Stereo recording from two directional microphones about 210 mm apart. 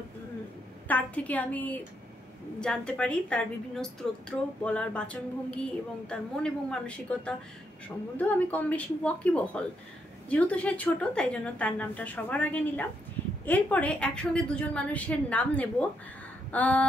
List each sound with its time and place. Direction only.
0.8 s a woman's voice: 10° left (ahead or behind)